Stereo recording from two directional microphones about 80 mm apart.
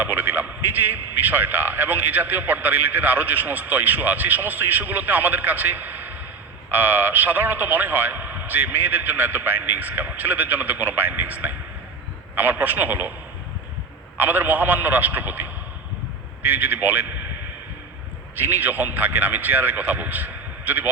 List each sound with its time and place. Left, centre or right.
0.0 s a sound: right
0.9 s a man's voice: right
14.2 s a man's voice: right
16.5 s a man's voice: right
18.6 s a man's voice: right